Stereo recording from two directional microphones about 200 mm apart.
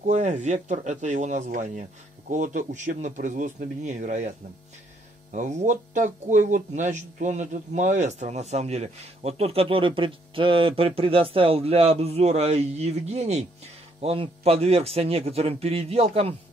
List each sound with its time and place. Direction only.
0.0 s speech: 35° right (ahead or behind)
5.3 s speech: 35° right (ahead or behind)